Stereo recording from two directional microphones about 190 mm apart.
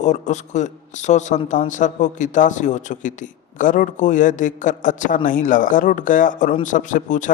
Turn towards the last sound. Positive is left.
turn(degrees=40)  # may be behind; listen again after turning